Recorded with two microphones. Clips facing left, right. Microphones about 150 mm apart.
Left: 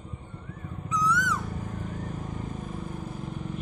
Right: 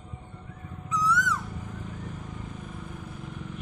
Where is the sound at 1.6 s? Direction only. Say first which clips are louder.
Left 4 dB; 45° left (ahead or behind).